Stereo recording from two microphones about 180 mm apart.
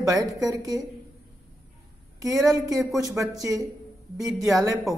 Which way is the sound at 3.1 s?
20° right (ahead or behind).